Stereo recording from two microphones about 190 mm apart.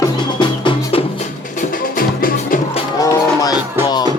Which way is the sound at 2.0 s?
50° left (ahead or behind).